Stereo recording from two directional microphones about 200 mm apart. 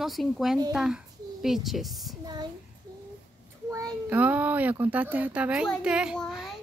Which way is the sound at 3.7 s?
15° right (ahead or behind).